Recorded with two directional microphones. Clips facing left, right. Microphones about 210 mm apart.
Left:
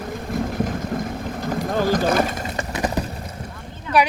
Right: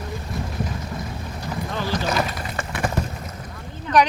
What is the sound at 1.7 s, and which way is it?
Boat, 45° left (ahead or behind).